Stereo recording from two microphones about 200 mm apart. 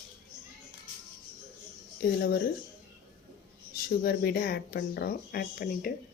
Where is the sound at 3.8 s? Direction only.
50° left (ahead or behind).